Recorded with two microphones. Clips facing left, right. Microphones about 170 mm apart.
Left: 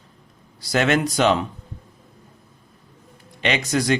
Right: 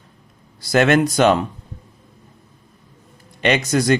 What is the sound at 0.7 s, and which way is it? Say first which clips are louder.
Speech: right 5 dB; 50° right (ahead or behind).